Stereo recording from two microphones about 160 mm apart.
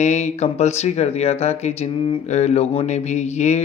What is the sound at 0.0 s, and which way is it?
Speech, 45° left (ahead or behind).